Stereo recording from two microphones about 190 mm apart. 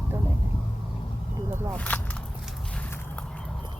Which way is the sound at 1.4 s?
15° right (ahead or behind).